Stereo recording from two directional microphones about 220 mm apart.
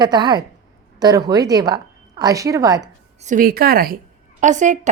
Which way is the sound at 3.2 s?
35° right (ahead or behind).